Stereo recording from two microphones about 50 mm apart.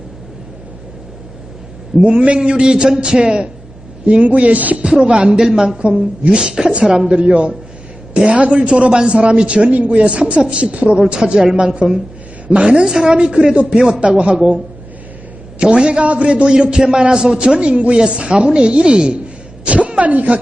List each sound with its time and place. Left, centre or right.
2.0 s a man's voice: right
4.8 s a man's voice: centre